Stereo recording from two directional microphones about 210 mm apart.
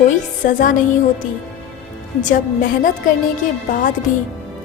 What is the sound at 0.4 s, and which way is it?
Speech, 40° left (ahead or behind).